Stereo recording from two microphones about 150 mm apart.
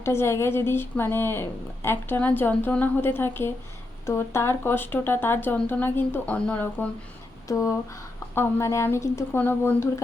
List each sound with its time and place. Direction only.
0.0 s a woman's voice: 15° left (ahead or behind)
7.4 s a woman's voice: 20° left (ahead or behind)